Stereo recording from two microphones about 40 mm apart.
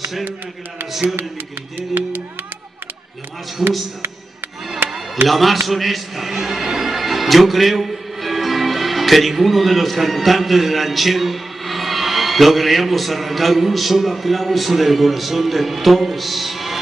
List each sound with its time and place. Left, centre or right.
1.8 s speech: right
3.6 s a man's voice: centre
4.8 s music: centre
5.3 s a man's voice: centre